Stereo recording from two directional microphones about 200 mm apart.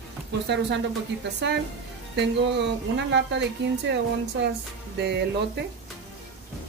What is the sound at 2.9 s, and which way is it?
Speech, 60° right (ahead or behind).